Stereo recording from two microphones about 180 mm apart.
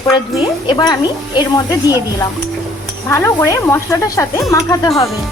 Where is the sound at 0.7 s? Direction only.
25° left (ahead or behind).